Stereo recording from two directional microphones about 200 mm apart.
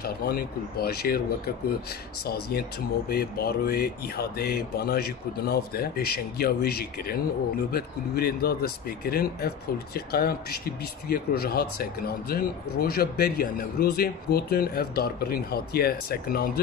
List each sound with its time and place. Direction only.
0.0 s speech: 50° left (ahead or behind)